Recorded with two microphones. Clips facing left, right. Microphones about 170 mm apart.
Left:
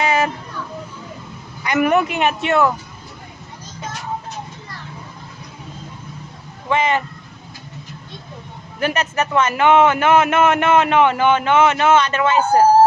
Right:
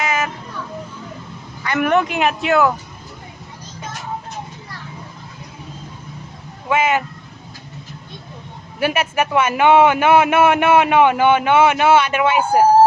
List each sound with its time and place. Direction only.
0.0 s vehicle: 30° left (ahead or behind)
1.6 s speech: 10° left (ahead or behind)
6.7 s speech: 5° right (ahead or behind)
8.8 s a man's voice: 10° right (ahead or behind)